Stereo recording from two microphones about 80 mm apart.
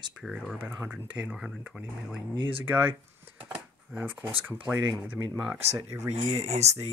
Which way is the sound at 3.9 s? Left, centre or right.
Centre.